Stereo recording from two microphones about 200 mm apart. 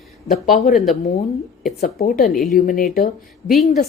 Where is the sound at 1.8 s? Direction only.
45° left (ahead or behind).